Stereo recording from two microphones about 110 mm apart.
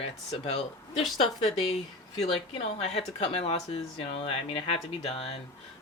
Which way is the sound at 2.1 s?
75° left (ahead or behind).